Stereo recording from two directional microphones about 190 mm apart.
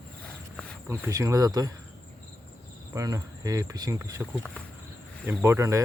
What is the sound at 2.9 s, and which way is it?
Speech, 15° right (ahead or behind).